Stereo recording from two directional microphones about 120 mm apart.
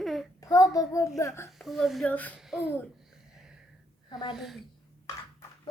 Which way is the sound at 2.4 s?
5° right (ahead or behind).